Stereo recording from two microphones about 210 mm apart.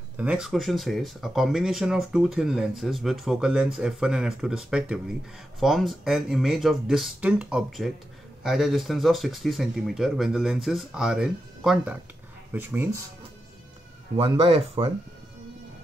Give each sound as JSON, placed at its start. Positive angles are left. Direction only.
{"t": 0.2, "sound": "speech", "side_deg": -5}
{"t": 14.1, "sound": "speech", "side_deg": -25}